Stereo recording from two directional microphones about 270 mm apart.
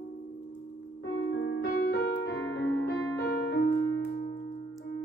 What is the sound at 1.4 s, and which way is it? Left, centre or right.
Piano, left.